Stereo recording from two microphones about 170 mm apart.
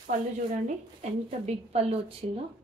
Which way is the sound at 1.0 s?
40° right (ahead or behind).